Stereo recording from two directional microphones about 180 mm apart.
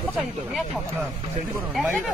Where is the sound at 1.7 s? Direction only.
Centre (ahead or behind).